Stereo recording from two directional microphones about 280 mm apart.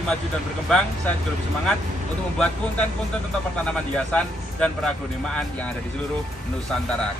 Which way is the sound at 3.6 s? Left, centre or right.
Centre.